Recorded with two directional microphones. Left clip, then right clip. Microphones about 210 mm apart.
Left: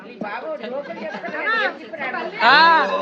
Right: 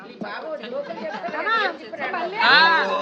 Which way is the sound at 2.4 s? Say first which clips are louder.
Left 3 dB; centre (ahead or behind).